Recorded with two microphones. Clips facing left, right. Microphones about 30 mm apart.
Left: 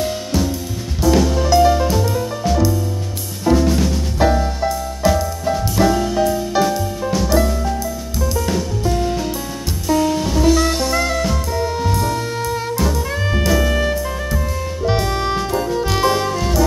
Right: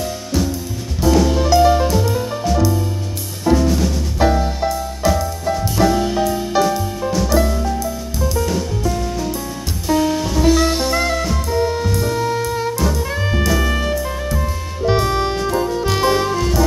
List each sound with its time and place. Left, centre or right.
1.0 s music: centre
3.4 s drum kit: centre
4.2 s music: centre
5.9 s music: centre
6.7 s music: centre
10.2 s drum kit: centre
11.3 s music: centre